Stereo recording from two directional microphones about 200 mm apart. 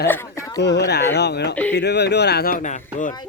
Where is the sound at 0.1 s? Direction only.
15° left (ahead or behind).